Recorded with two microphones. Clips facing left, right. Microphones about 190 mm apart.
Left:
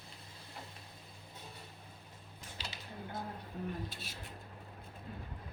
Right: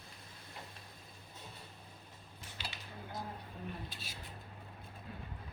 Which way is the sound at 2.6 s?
35° left (ahead or behind).